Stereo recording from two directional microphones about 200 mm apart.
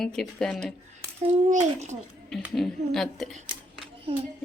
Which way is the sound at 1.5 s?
35° right (ahead or behind).